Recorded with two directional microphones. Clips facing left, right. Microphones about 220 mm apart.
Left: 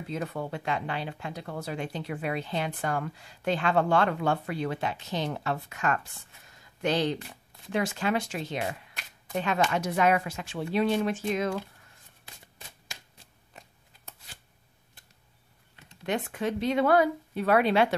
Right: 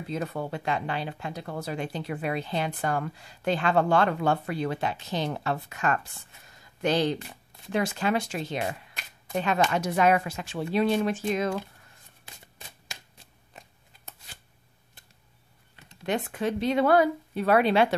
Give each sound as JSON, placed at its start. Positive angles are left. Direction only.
{"t": 0.1, "sound": "speech", "side_deg": -40}
{"t": 12.9, "sound": "shuffling cards", "side_deg": -25}
{"t": 16.1, "sound": "speech", "side_deg": -35}